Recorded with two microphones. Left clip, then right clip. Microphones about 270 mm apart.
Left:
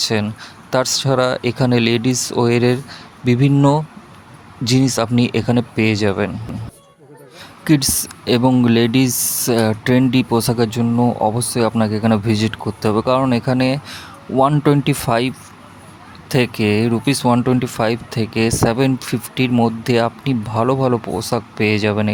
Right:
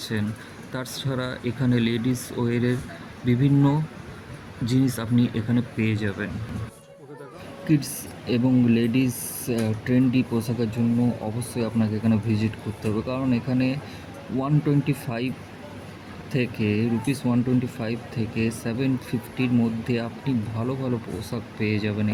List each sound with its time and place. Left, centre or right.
0.7 s speech: left
7.7 s speech: left
16.4 s speech: left